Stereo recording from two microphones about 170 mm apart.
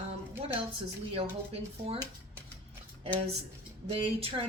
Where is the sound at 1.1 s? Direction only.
35° right (ahead or behind).